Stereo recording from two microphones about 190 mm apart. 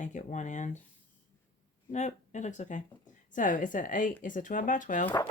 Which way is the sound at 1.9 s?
40° left (ahead or behind).